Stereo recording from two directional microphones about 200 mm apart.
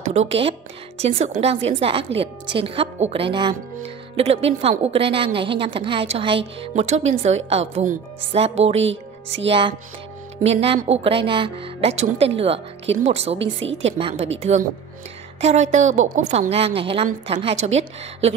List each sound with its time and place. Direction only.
0.0 s a woman's voice: 35° right (ahead or behind)
8.8 s speech: 65° right (ahead or behind)
9.5 s a woman's voice: 25° right (ahead or behind)
13.4 s a woman's voice: 65° right (ahead or behind)
13.8 s a woman's voice: 25° right (ahead or behind)